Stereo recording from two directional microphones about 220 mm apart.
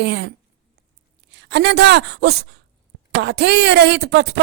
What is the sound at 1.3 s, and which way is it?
A woman's voice, 50° right (ahead or behind).